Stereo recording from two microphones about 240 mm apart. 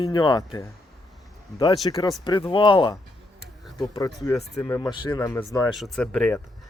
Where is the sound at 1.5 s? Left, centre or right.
Centre.